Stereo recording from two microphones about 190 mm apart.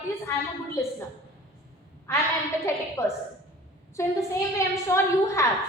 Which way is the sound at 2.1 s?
15° left (ahead or behind).